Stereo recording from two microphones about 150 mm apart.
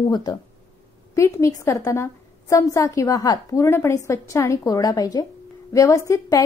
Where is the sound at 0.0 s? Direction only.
25° left (ahead or behind).